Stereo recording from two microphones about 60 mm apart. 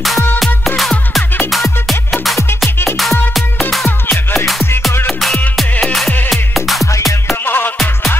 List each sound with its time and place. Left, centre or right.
0.7 s music: centre
3.8 s music: left
6.3 s music: centre
6.9 s music: left
7.4 s music: left